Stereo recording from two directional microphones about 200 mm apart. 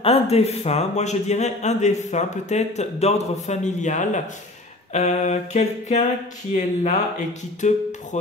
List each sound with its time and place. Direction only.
0.0 s speech: 30° left (ahead or behind)